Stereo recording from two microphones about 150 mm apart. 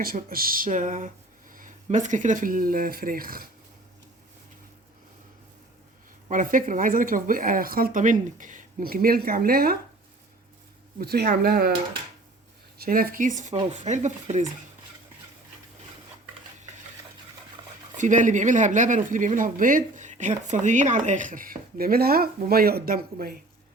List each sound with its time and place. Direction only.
0.0 s speech: 75° right (ahead or behind)
6.2 s speech: 60° right (ahead or behind); by 9.7 s 85° right
10.9 s speech: 90° right
12.8 s speech: 70° right (ahead or behind); by 14.5 s 50° right (ahead or behind)
17.9 s speech: 55° right (ahead or behind); by 23.4 s 85° right